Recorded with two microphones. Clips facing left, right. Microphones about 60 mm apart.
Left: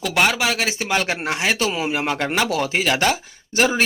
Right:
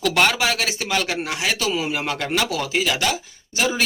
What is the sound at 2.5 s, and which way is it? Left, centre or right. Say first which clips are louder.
Speech: left 2 dB; left.